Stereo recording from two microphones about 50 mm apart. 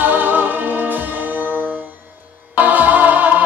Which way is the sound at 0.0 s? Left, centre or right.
Right.